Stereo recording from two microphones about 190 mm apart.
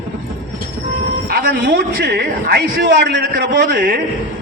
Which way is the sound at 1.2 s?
55° right (ahead or behind).